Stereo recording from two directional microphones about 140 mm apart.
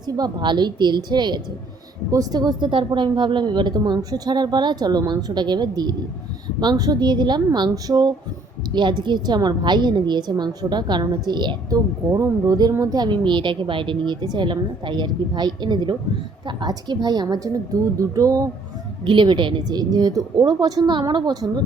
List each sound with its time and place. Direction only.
0.0 s a woman's voice: 30° right (ahead or behind)
19.0 s a woman's voice: 35° right (ahead or behind)